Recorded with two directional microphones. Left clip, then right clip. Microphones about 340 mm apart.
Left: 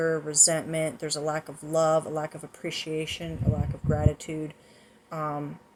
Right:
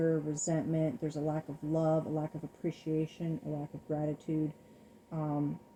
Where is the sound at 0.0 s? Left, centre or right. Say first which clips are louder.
Left 8 dB; left.